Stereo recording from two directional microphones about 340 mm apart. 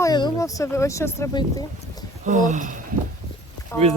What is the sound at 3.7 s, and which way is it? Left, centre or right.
Speech, centre.